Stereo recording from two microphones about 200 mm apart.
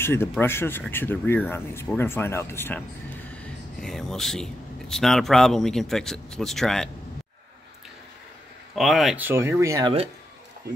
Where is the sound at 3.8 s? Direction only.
Centre (ahead or behind).